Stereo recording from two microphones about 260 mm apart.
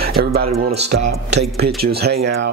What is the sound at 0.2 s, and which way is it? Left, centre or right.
Speech, right.